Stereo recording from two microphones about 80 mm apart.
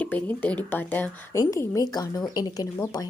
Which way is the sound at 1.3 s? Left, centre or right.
Left.